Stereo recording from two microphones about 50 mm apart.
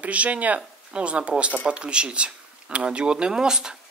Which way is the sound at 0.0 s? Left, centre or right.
Right.